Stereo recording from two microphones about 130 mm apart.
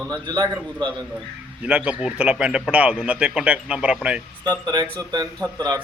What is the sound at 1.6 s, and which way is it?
A man's voice, 10° right (ahead or behind).